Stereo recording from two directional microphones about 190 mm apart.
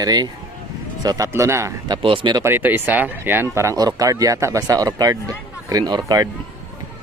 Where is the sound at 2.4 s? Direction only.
10° right (ahead or behind).